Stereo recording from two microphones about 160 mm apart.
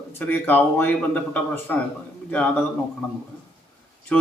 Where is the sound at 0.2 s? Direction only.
10° left (ahead or behind).